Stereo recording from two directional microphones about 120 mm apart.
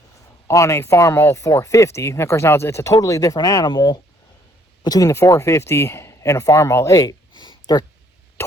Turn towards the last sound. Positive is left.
turn(degrees=35)  # may be behind; listen again after turning